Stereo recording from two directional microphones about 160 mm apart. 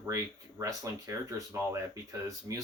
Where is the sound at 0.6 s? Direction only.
20° right (ahead or behind).